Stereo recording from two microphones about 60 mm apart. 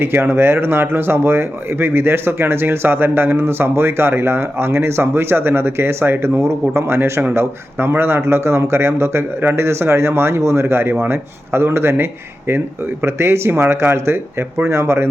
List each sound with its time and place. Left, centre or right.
0.0 s speech: right